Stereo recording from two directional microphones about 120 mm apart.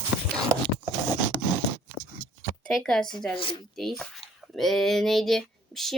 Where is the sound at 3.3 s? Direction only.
45° left (ahead or behind).